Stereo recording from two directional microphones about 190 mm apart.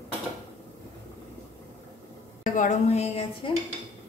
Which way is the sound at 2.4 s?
45° left (ahead or behind).